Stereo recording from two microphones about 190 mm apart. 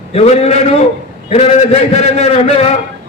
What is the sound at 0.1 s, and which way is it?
A man's voice, 30° left (ahead or behind).